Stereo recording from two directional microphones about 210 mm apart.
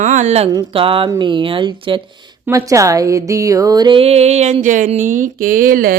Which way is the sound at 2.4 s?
15° right (ahead or behind).